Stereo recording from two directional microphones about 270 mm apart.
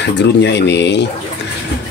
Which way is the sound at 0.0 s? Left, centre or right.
Left.